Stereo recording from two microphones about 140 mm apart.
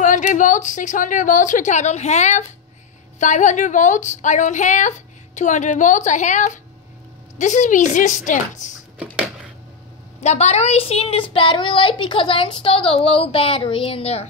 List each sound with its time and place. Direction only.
0.0 s a woman's voice: 65° left (ahead or behind)
10.2 s a woman's voice: 50° left (ahead or behind)